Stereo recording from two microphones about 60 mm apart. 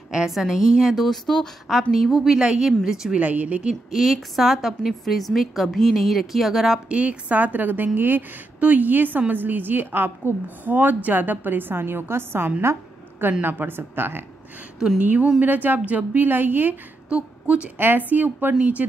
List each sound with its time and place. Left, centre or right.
0.1 s a woman's voice: centre
0.9 s a woman's voice: centre
1.7 s a woman's voice: centre
3.2 s a woman's voice: right
3.9 s a woman's voice: centre
6.9 s a woman's voice: right
15.0 s a woman's voice: right
17.1 s a woman's voice: right
17.7 s a woman's voice: right